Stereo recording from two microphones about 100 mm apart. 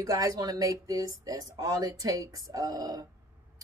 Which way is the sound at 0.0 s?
35° right (ahead or behind).